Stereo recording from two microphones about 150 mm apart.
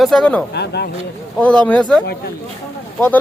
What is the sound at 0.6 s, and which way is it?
Speech, 90° left.